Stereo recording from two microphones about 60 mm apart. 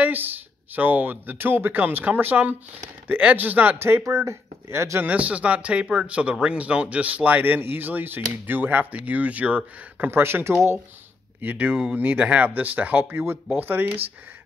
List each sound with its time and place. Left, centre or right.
0.0 s speech: right
3.7 s speech: right
4.0 s speech: right
5.0 s speech: right
9.9 s speech: right
11.4 s speech: right